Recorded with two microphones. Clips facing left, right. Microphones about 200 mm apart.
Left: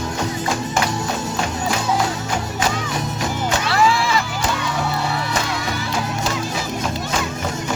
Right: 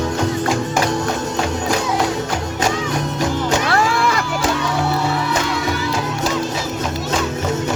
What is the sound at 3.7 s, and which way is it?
Music, 55° right (ahead or behind).